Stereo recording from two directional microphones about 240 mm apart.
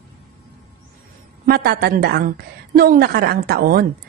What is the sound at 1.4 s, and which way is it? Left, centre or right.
A woman's voice, right.